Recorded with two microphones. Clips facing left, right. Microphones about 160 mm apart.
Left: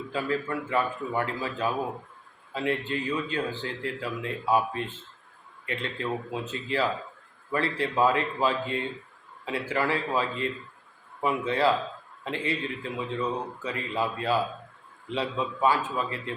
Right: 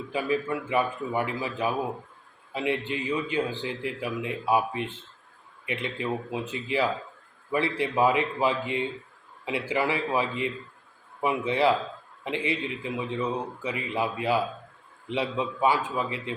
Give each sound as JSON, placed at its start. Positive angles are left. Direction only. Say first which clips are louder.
{"t": 0.1, "sound": "a man's voice", "louder": "right 2 dB", "side_deg": -15}